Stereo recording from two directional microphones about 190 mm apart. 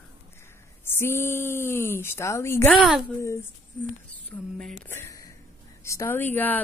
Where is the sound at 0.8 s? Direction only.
10° left (ahead or behind).